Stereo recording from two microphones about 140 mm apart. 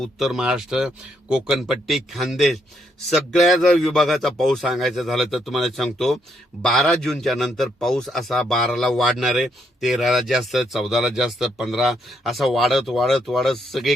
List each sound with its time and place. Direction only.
0.0 s a man's voice: centre (ahead or behind)